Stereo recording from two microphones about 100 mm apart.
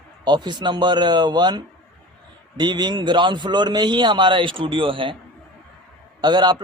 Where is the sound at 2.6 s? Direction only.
45° right (ahead or behind).